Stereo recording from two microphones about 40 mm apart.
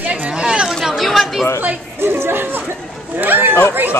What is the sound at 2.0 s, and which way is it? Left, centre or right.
Chatter, right.